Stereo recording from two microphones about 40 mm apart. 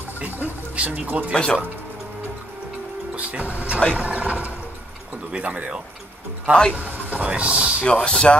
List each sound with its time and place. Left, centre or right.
0.2 s speech: right
1.3 s speech: left
3.2 s speech: right
3.9 s mechanisms: right
5.3 s speech: right
7.8 s speech: left